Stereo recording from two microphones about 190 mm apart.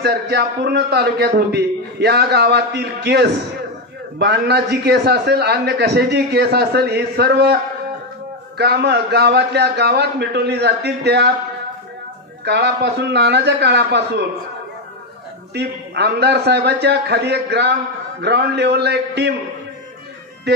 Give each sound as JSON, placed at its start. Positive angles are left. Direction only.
{"t": 0.0, "sound": "a man's voice", "side_deg": -60}
{"t": 8.5, "sound": "a man's voice", "side_deg": -60}
{"t": 12.4, "sound": "a man's voice", "side_deg": -60}
{"t": 15.5, "sound": "a man's voice", "side_deg": -60}